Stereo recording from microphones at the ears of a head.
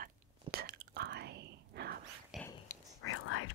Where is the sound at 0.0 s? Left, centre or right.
Right.